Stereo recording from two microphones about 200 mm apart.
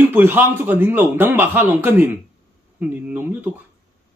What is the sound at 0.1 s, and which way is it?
Speech, 10° right (ahead or behind).